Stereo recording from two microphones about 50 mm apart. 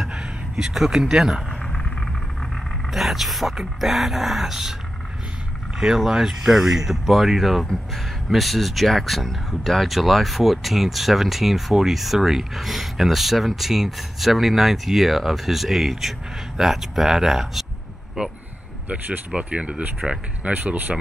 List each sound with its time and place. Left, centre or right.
0.0 s a sound: centre
0.7 s speech: centre
1.7 s a sound: centre
2.5 s speech: centre
5.8 s speech: centre
18.2 s speech: centre